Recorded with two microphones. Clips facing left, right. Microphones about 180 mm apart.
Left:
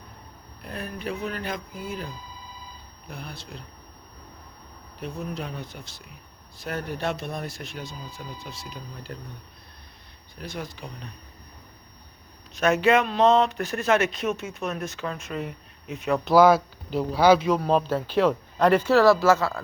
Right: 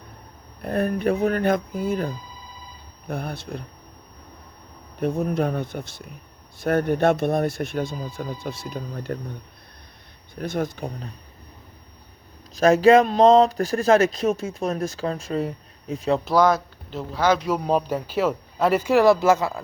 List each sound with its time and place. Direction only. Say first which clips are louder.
0.6 s speech: right 11 dB; 50° right (ahead or behind)
4.9 s speech: right 10 dB; 50° right (ahead or behind)
10.3 s speech: right 9 dB; 50° right (ahead or behind)
12.5 s speech: right 6 dB; 35° right (ahead or behind)
16.2 s speech: left 5 dB; 5° left (ahead or behind)
17.6 s speech: even; 10° right (ahead or behind)